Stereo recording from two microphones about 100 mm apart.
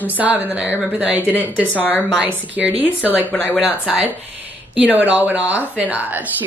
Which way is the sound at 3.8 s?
15° right (ahead or behind).